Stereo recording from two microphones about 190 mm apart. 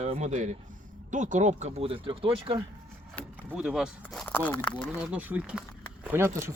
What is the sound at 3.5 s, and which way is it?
Speech, 5° right (ahead or behind).